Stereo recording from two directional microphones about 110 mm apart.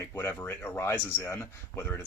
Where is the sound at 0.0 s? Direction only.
20° left (ahead or behind).